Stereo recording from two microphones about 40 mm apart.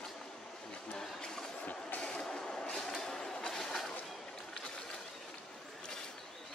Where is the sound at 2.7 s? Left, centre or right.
Centre.